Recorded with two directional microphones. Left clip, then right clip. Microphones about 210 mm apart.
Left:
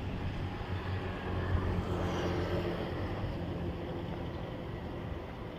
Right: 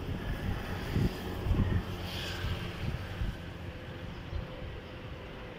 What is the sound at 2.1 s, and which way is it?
Vehicle, centre (ahead or behind).